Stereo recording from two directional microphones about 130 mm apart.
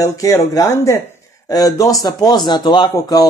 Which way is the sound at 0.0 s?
25° left (ahead or behind).